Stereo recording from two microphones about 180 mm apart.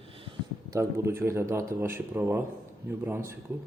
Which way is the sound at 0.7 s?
15° right (ahead or behind).